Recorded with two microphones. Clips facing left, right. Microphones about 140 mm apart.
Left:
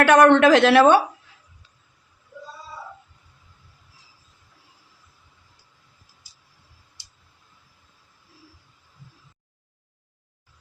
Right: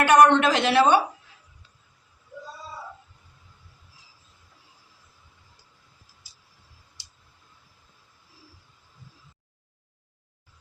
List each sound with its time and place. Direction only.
0.0 s speech: 90° left; by 1.0 s 65° left (ahead or behind)